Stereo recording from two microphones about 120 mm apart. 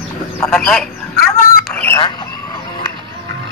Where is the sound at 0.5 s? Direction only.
5° left (ahead or behind).